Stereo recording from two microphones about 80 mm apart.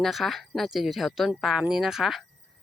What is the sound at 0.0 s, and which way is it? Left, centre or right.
Speech, centre.